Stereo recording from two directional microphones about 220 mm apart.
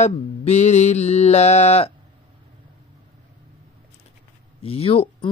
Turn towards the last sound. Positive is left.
turn(degrees=25)  # may be behind; listen again after turning